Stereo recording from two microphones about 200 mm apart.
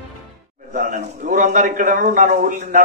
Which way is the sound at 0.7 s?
40° right (ahead or behind).